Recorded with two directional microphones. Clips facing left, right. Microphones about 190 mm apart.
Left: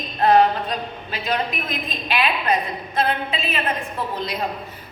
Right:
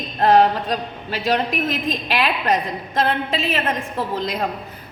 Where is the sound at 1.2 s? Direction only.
90° right.